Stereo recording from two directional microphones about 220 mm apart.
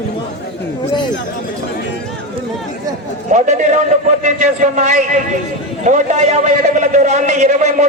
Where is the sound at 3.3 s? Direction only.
35° right (ahead or behind).